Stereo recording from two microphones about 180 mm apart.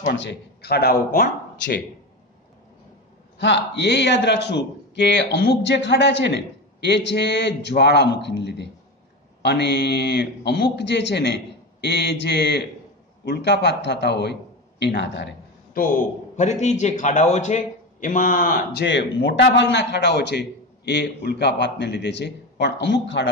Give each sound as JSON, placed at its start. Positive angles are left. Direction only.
{"t": 0.0, "sound": "speech", "side_deg": 75}
{"t": 3.3, "sound": "a man's voice", "side_deg": 80}
{"t": 15.7, "sound": "a man's voice", "side_deg": 50}
{"t": 18.9, "sound": "a man's voice", "side_deg": 80}